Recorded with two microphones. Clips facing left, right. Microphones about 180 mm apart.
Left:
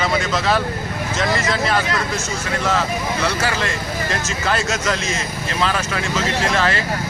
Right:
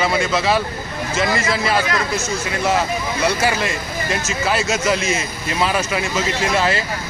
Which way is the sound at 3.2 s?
10° right (ahead or behind).